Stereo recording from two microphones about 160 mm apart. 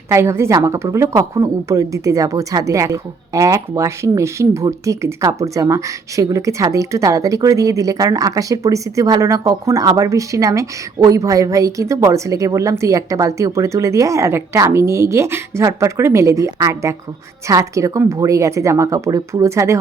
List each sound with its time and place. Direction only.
0.1 s speech: 15° right (ahead or behind)